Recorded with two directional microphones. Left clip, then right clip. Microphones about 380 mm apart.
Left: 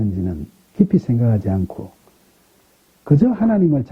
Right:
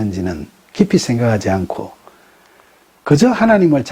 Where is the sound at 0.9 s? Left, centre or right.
Centre.